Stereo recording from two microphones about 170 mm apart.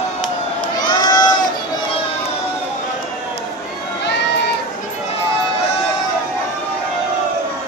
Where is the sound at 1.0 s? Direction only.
25° left (ahead or behind).